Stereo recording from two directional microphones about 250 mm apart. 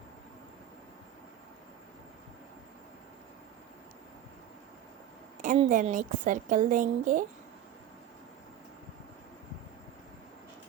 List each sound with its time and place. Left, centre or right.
5.4 s a woman's voice: right